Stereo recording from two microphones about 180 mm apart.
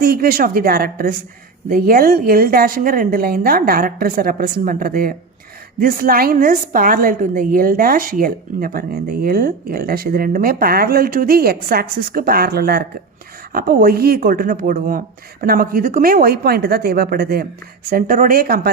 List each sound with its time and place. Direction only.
0.0 s a woman's voice: 55° right (ahead or behind)